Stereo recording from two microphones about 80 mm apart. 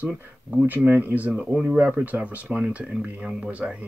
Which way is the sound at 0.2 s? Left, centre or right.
Right.